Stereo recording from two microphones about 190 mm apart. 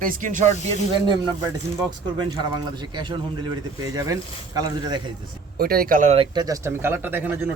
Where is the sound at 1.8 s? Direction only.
20° right (ahead or behind).